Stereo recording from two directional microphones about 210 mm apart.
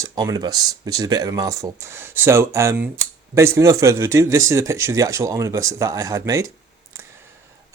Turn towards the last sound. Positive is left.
turn(degrees=-15)  # may be behind; listen again after turning